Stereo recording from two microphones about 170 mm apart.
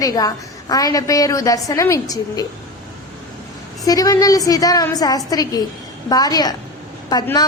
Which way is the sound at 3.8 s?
20° left (ahead or behind).